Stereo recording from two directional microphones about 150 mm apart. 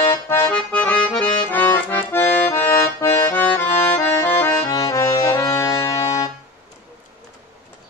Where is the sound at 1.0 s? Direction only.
30° left (ahead or behind).